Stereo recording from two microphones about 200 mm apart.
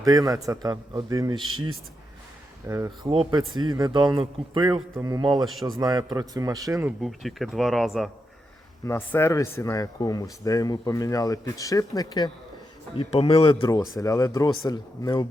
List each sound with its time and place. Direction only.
0.0 s a man's voice: 20° right (ahead or behind)
2.6 s a man's voice: 15° right (ahead or behind)
5.5 s speech: centre (ahead or behind)
5.8 s a man's voice: 20° right (ahead or behind)
7.0 s speech: centre (ahead or behind)
8.8 s speech: 10° left (ahead or behind)
13.0 s speech: 30° left (ahead or behind)